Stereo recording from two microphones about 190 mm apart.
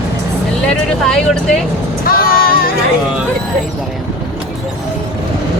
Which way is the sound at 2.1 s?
50° left (ahead or behind).